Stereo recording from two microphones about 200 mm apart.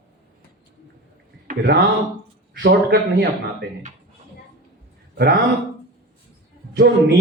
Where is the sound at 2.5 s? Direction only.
55° right (ahead or behind).